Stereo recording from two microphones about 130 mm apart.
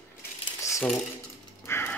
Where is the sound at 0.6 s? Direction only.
25° left (ahead or behind).